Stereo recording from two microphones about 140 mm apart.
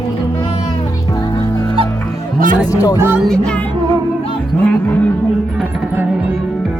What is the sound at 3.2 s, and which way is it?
Music, 5° left (ahead or behind).